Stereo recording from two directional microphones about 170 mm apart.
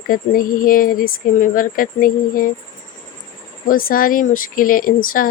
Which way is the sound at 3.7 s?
55° left (ahead or behind).